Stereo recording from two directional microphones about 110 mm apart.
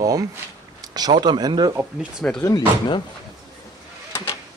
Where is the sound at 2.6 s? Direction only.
45° left (ahead or behind).